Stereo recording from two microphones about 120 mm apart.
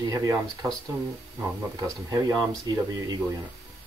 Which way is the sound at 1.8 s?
30° right (ahead or behind).